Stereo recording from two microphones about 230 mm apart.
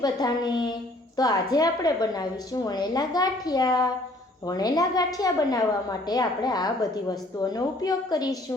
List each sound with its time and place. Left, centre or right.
0.0 s a woman's voice: centre